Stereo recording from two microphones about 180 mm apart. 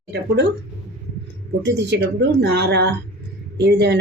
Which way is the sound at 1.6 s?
75° right (ahead or behind).